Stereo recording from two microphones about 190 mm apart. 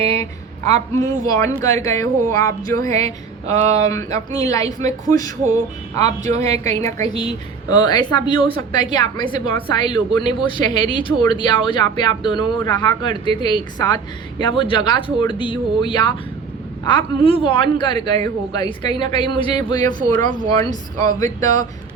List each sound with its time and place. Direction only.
0.7 s a woman's voice: 20° left (ahead or behind)
6.1 s a woman's voice: 35° right (ahead or behind)
6.4 s a woman's voice: 15° left (ahead or behind)